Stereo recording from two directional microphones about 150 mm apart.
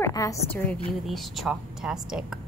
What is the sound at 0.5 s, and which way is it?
Speech, 15° left (ahead or behind).